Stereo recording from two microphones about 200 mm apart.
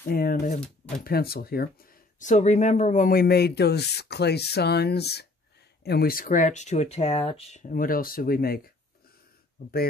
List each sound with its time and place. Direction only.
0.1 s speech: 45° left (ahead or behind); by 7.6 s 30° left (ahead or behind)
7.7 s speech: 45° left (ahead or behind)